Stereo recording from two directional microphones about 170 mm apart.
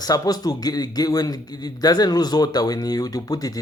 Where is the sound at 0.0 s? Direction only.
20° left (ahead or behind).